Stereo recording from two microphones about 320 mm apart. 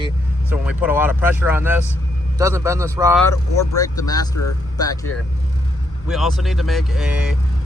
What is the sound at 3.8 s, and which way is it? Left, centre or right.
Speech, centre.